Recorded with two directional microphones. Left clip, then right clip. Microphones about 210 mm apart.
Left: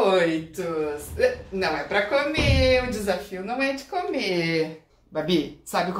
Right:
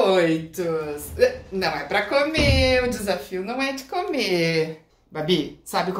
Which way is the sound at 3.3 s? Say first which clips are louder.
Even; 45° right (ahead or behind).